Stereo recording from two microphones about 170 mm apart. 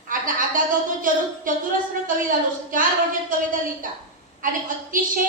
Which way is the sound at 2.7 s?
55° right (ahead or behind).